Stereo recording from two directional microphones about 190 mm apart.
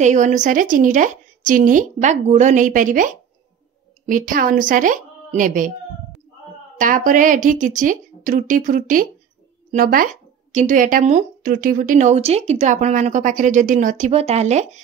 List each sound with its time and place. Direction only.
0.0 s a woman's voice: 40° right (ahead or behind)
6.8 s a woman's voice: 45° right (ahead or behind)